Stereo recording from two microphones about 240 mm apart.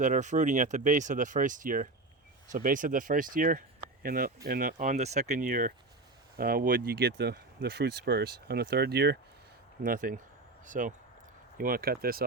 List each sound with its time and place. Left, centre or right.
0.0 s speech: right